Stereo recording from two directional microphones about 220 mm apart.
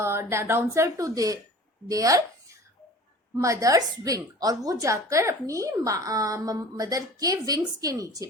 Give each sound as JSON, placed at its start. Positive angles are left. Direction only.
{"t": 0.0, "sound": "a woman's voice", "side_deg": -10}